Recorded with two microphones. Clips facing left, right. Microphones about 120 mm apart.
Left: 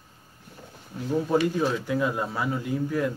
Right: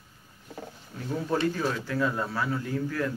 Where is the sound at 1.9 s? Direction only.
15° left (ahead or behind).